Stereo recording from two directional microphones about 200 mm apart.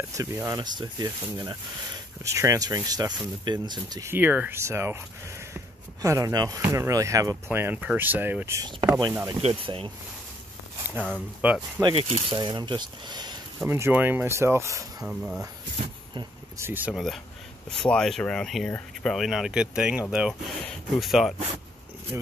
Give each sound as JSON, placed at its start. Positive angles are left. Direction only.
{"t": 0.1, "sound": "speech", "side_deg": -15}
{"t": 6.0, "sound": "speech", "side_deg": -15}
{"t": 9.4, "sound": "speech", "side_deg": -30}
{"t": 11.4, "sound": "speech", "side_deg": -5}
{"t": 11.8, "sound": "speech", "side_deg": -30}
{"t": 13.7, "sound": "speech", "side_deg": -10}
{"t": 15.0, "sound": "speech", "side_deg": -5}
{"t": 16.5, "sound": "speech", "side_deg": -10}